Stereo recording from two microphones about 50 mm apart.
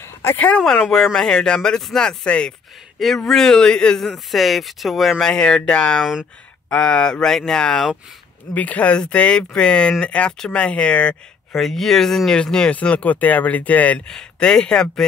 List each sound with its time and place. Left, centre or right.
0.0 s a sound: left
0.4 s speech: left
0.8 s speech: centre
4.0 s speech: centre
5.2 s speech: centre
8.5 s speech: left
11.5 s speech: centre; by 14.0 s left
14.0 s speech: centre